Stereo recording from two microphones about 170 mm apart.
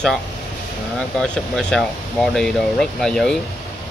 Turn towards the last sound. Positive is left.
turn(degrees=5)  # may be behind; listen again after turning